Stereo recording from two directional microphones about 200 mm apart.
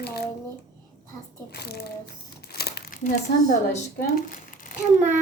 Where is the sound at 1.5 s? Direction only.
50° left (ahead or behind).